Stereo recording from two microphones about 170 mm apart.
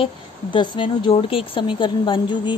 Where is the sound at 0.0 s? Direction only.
30° left (ahead or behind).